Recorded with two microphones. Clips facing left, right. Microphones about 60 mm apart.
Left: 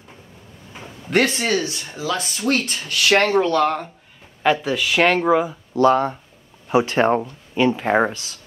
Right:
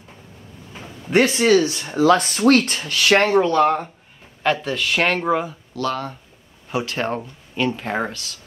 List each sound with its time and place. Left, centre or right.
1.3 s speech: right
2.0 s speech: right
2.9 s speech: right
3.2 s speech: centre
4.4 s speech: centre
5.8 s speech: left
7.6 s speech: centre
7.9 s speech: left